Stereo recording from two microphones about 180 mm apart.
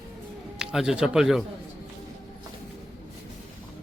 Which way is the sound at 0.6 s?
5° right (ahead or behind).